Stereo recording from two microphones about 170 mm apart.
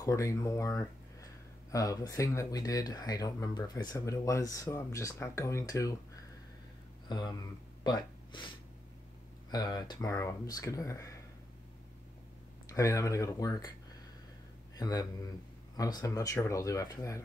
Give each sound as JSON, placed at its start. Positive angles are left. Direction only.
{"t": 0.0, "sound": "speech", "side_deg": 20}
{"t": 7.1, "sound": "speech", "side_deg": 25}
{"t": 7.8, "sound": "a sound", "side_deg": 25}
{"t": 9.5, "sound": "speech", "side_deg": 25}
{"t": 12.6, "sound": "speech", "side_deg": 20}
{"t": 14.8, "sound": "speech", "side_deg": 20}